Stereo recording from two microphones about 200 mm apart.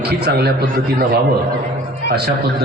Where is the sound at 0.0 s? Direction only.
55° right (ahead or behind).